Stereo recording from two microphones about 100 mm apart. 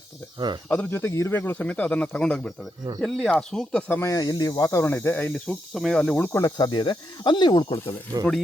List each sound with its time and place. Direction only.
0.3 s speech: 45° right (ahead or behind)
0.7 s speech: 20° left (ahead or behind)
4.0 s speech: 40° left (ahead or behind)
4.8 s speech: 25° left (ahead or behind)
5.3 s speech: centre (ahead or behind)
6.1 s speech: 20° left (ahead or behind)
6.6 s speech: 50° left (ahead or behind)